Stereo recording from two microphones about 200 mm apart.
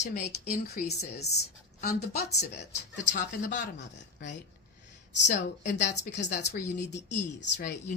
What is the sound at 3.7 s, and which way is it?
Speech, 60° left (ahead or behind).